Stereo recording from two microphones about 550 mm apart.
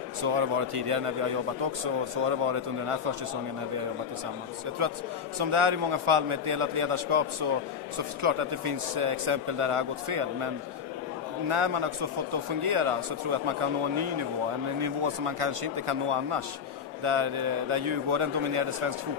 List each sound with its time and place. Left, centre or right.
0.2 s speech: right
5.4 s a man's voice: right